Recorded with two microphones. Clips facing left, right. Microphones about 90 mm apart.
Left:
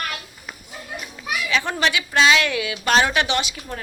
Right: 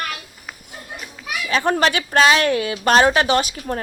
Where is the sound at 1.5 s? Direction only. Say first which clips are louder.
Right 5 dB; 40° right (ahead or behind).